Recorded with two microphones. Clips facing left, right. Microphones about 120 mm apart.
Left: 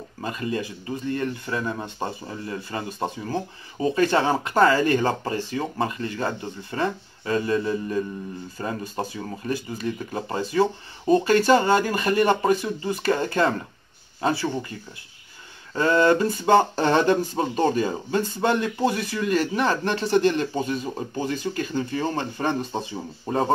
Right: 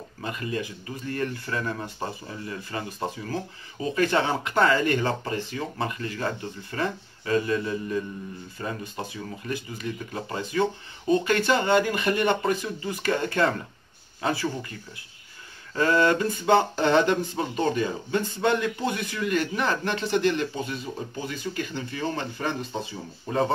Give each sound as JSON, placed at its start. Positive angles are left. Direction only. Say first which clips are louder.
{"t": 0.2, "sound": "speech", "louder": "left 3 dB", "side_deg": 30}
{"t": 3.3, "sound": "speech", "louder": "left 3 dB", "side_deg": 30}
{"t": 15.7, "sound": "speech", "louder": "left 3 dB", "side_deg": 25}